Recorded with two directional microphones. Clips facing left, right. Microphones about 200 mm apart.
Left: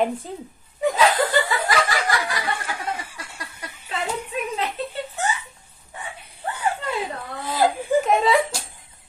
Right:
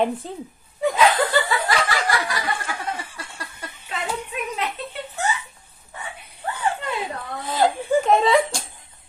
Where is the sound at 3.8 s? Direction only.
30° left (ahead or behind).